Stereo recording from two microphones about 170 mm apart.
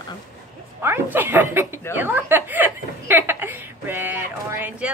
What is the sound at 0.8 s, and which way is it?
Speech, 10° right (ahead or behind).